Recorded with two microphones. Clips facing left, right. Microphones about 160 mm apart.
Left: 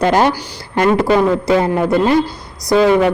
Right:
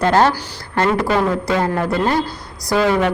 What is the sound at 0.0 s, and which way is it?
A man's voice, 15° left (ahead or behind).